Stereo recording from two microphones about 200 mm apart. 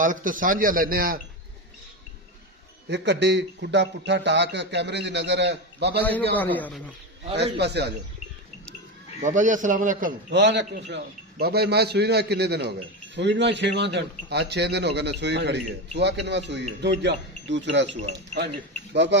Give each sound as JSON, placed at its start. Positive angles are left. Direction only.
{"t": 0.0, "sound": "a man's voice", "side_deg": -40}
{"t": 2.9, "sound": "speech", "side_deg": -60}
{"t": 6.3, "sound": "a man's voice", "side_deg": 10}
{"t": 7.5, "sound": "speech", "side_deg": -55}
{"t": 9.2, "sound": "a man's voice", "side_deg": -40}
{"t": 10.3, "sound": "speech", "side_deg": -60}